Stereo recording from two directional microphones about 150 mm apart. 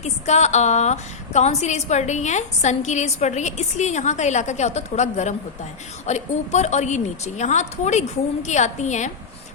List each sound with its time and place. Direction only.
0.0 s a woman's voice: 50° left (ahead or behind)